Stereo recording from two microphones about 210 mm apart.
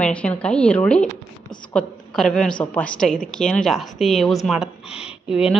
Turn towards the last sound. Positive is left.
turn(degrees=-5)  # may be behind; listen again after turning